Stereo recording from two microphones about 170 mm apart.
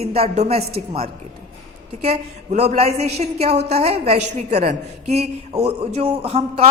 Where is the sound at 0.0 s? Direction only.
35° right (ahead or behind).